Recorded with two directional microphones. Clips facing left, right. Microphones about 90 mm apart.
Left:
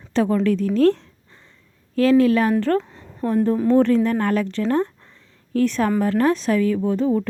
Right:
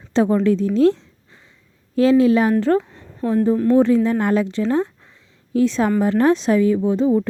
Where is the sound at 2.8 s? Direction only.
Centre (ahead or behind).